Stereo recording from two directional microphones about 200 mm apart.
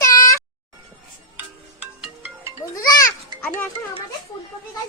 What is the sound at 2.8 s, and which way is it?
Speech, 15° left (ahead or behind).